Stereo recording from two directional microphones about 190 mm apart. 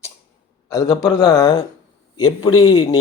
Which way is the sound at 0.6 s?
15° left (ahead or behind).